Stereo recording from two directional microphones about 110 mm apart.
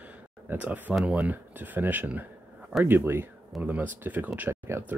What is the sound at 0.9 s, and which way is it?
A man's voice, 10° right (ahead or behind).